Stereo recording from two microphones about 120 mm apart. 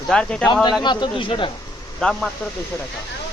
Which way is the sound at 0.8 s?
40° left (ahead or behind).